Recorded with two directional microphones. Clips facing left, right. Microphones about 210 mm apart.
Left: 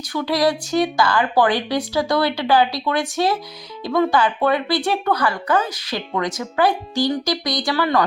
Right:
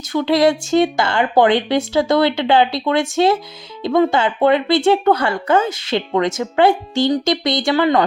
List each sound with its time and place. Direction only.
0.1 s speech: 25° right (ahead or behind)